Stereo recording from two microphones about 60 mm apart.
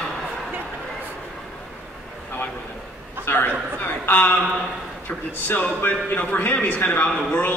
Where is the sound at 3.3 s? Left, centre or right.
Left.